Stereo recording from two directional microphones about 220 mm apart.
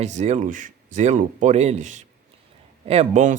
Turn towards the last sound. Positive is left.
turn(degrees=-35)  # may be behind; listen again after turning